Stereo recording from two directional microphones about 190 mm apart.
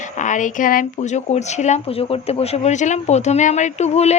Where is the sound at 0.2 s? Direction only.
40° left (ahead or behind).